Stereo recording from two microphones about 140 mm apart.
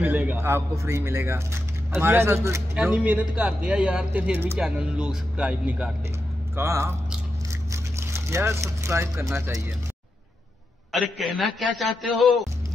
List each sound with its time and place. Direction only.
0.0 s speech: 10° right (ahead or behind)
6.5 s speech: 20° right (ahead or behind)
10.9 s a man's voice: centre (ahead or behind)